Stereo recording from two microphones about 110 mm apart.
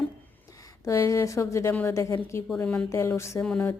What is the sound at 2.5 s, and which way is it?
Speech, 10° left (ahead or behind).